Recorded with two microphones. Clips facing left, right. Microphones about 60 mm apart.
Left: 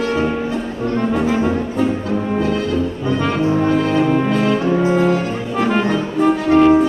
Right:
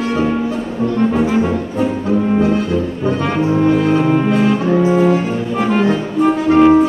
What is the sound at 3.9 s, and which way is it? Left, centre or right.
Brass instrument, centre.